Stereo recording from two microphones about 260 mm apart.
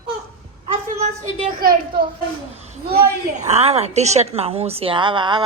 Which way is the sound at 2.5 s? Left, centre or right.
Right.